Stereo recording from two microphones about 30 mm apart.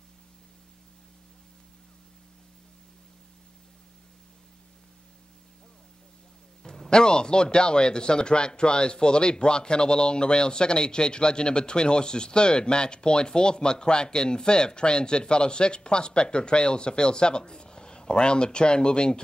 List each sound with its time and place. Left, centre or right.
6.9 s a man's voice: left